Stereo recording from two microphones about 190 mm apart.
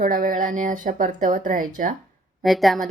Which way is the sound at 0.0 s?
45° right (ahead or behind).